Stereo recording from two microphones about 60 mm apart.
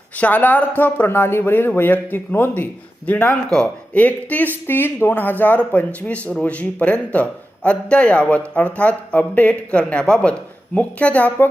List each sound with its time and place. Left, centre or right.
0.2 s a man's voice: left
3.3 s a man's voice: centre
3.9 s speech: left